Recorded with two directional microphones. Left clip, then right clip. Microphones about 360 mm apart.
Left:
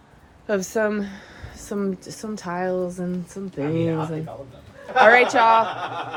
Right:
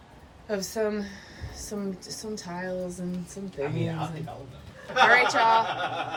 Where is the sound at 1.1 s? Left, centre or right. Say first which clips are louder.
Left 2 dB; centre.